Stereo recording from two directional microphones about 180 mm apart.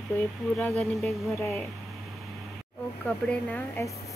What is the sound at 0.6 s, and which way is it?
Speech, 5° left (ahead or behind).